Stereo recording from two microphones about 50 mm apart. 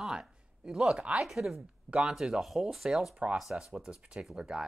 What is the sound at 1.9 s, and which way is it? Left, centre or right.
Speech, centre.